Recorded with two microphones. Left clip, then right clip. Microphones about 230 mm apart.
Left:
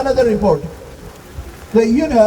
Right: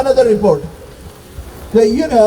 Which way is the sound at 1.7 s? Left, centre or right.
Right.